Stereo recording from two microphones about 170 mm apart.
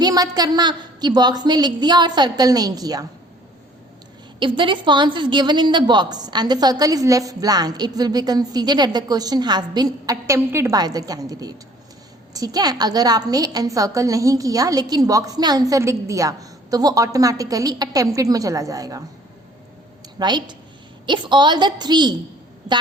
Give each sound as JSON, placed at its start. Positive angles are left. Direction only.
{"t": 0.0, "sound": "a woman's voice", "side_deg": -25}
{"t": 4.4, "sound": "a woman's voice", "side_deg": -30}
{"t": 20.1, "sound": "a woman's voice", "side_deg": -25}